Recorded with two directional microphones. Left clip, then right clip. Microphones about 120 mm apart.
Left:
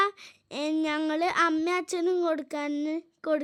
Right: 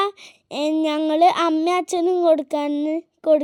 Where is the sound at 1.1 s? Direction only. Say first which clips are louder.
Right 10 dB; 35° right (ahead or behind).